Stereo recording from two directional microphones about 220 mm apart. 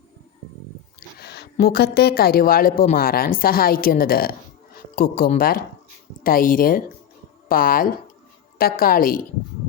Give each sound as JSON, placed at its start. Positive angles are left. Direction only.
{"t": 0.9, "sound": "a woman's voice", "side_deg": 50}